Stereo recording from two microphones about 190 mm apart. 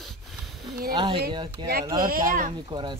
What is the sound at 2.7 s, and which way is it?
Speech, 25° right (ahead or behind).